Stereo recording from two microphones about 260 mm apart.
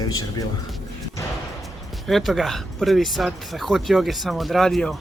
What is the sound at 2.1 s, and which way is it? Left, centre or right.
Speech, centre.